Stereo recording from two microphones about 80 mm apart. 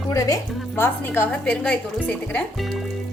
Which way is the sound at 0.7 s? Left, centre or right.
Left.